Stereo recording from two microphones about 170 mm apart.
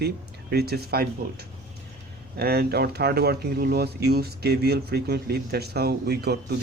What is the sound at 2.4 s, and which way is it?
Speech, 65° right (ahead or behind).